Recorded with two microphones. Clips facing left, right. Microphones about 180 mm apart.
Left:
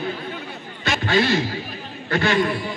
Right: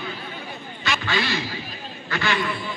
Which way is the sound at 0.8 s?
50° left (ahead or behind).